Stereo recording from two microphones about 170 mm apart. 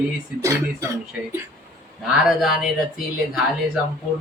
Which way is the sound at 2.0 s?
Centre (ahead or behind).